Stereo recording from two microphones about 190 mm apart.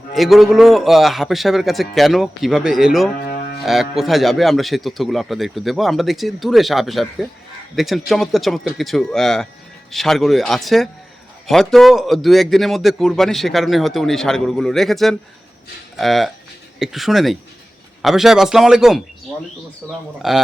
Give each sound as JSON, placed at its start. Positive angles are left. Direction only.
{"t": 0.1, "sound": "a man's voice", "side_deg": 0}
{"t": 3.2, "sound": "music", "side_deg": 55}
{"t": 3.7, "sound": "a man's voice", "side_deg": 0}